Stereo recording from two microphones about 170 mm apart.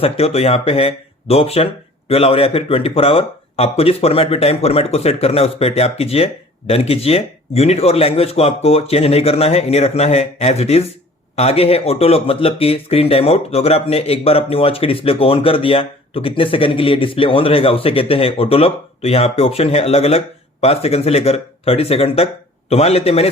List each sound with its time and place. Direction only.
0.0 s speech: 35° left (ahead or behind)